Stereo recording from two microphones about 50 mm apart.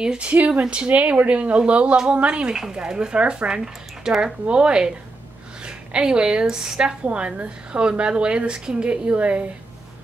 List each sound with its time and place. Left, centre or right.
0.2 s a woman's voice: right; by 7.0 s centre
7.1 s a woman's voice: right